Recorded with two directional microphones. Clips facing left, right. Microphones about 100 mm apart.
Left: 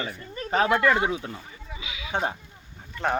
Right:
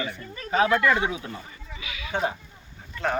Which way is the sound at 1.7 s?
20° left (ahead or behind).